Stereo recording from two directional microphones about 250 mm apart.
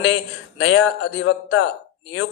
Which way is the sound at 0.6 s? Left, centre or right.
Left.